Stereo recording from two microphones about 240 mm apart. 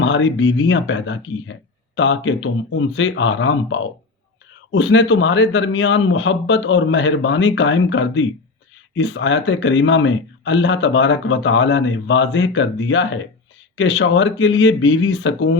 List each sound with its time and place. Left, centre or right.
0.0 s speech: left